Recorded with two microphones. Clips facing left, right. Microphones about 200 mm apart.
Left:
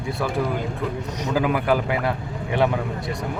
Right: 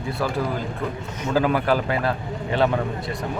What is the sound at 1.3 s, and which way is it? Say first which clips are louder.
Speech: right 1 dB; 15° left (ahead or behind).